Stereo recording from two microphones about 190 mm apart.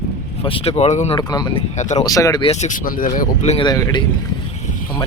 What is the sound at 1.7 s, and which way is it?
Speech, 40° left (ahead or behind).